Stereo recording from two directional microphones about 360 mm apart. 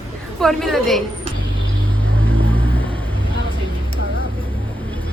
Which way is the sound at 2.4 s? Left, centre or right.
Centre.